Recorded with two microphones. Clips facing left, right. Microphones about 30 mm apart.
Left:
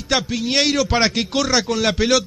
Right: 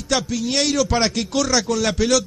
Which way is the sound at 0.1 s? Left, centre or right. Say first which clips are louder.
Left 2 dB; left.